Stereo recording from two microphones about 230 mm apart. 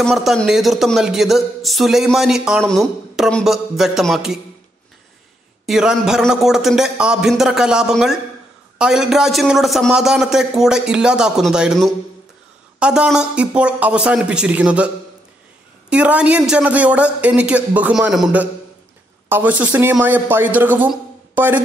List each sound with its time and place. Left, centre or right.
0.0 s speech: centre
5.7 s speech: centre
15.9 s a man's voice: centre